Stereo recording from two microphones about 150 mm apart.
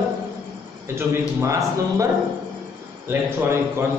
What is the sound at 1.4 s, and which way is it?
Speech, 20° right (ahead or behind).